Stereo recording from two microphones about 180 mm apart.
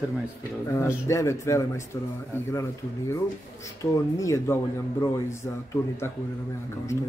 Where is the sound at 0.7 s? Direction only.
15° left (ahead or behind).